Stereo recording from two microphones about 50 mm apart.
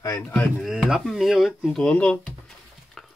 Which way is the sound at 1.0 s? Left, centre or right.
Centre.